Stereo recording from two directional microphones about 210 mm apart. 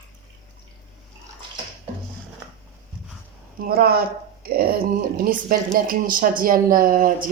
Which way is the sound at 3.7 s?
45° right (ahead or behind).